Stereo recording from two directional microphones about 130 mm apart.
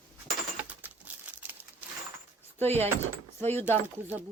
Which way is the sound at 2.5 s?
15° left (ahead or behind).